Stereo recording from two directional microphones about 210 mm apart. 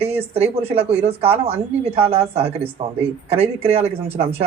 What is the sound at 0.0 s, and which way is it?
Speech, 30° right (ahead or behind).